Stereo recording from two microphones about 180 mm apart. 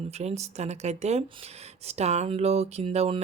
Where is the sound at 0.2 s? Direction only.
35° right (ahead or behind).